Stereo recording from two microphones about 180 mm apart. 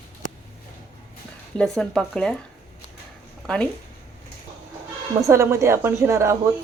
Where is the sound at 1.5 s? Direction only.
5° left (ahead or behind).